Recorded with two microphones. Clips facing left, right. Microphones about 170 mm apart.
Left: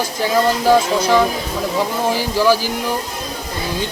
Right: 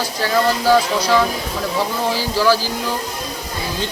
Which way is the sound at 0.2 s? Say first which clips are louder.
Left 1 dB; 20° left (ahead or behind).